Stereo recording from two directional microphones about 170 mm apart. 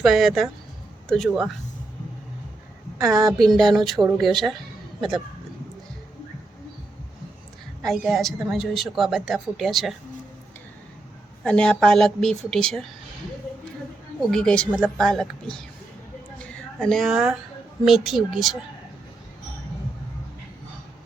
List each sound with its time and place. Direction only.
0.0 s a woman's voice: centre (ahead or behind)
3.0 s a woman's voice: 20° right (ahead or behind)
3.3 s a woman's voice: centre (ahead or behind)
7.8 s a woman's voice: centre (ahead or behind)
11.4 s a woman's voice: 5° left (ahead or behind)
14.2 s a woman's voice: 5° left (ahead or behind)